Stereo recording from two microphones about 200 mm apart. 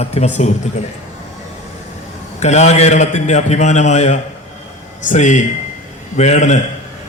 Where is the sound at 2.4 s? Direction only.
35° left (ahead or behind).